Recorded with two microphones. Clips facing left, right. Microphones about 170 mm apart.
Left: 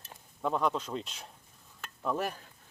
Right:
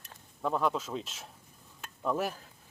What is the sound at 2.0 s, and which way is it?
Stir, 5° right (ahead or behind).